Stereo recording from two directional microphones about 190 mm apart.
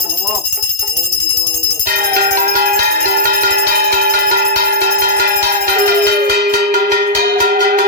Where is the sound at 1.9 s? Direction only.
55° right (ahead or behind).